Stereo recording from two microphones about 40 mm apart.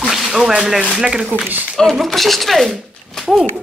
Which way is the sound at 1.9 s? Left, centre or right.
Centre.